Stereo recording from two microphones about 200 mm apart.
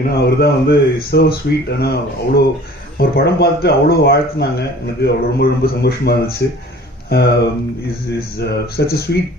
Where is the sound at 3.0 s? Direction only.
50° left (ahead or behind).